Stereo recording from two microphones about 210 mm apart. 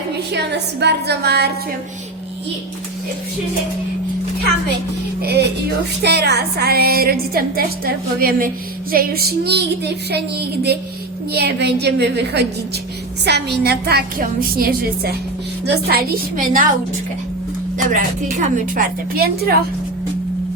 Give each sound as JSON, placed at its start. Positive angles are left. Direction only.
{"t": 0.3, "sound": "music", "side_deg": -55}
{"t": 5.2, "sound": "music", "side_deg": -50}
{"t": 17.8, "sound": "a woman's voice", "side_deg": -40}